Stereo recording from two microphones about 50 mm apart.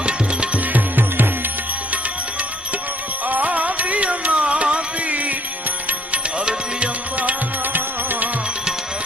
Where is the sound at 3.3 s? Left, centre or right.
Right.